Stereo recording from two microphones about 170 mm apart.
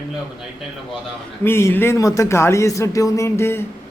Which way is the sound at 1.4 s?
15° left (ahead or behind).